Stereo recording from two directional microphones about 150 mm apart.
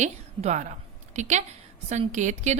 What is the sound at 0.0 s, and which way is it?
A woman's voice, 50° right (ahead or behind).